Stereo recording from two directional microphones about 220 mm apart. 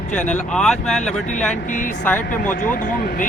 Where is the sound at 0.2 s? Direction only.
5° left (ahead or behind).